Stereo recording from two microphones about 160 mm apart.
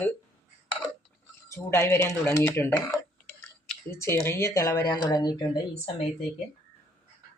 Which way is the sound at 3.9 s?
15° left (ahead or behind).